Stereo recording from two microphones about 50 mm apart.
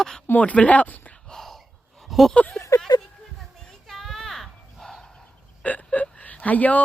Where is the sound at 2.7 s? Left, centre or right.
Left.